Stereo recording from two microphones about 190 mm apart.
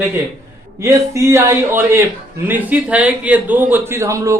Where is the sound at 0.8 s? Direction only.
15° right (ahead or behind).